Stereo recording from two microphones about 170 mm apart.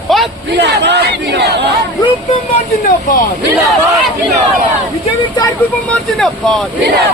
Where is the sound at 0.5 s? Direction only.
90° right.